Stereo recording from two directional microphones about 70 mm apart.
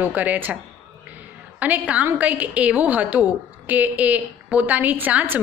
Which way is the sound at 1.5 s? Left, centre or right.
Right.